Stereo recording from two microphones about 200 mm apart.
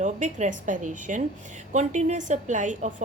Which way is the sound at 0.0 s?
35° right (ahead or behind).